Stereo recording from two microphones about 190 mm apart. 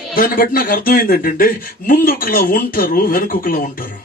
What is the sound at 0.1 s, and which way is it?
Speech, 50° left (ahead or behind).